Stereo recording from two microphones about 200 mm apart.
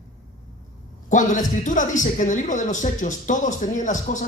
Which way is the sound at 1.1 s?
40° left (ahead or behind).